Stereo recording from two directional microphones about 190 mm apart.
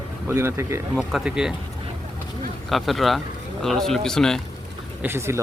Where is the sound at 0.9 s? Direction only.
5° right (ahead or behind).